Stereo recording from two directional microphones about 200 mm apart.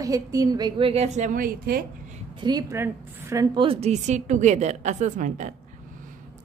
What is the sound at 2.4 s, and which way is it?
A woman's voice, 20° right (ahead or behind).